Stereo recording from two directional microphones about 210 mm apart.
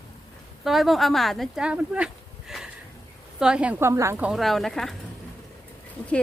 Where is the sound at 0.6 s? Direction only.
Centre (ahead or behind).